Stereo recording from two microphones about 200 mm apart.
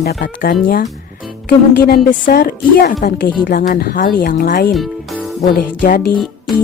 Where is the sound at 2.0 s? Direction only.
45° left (ahead or behind).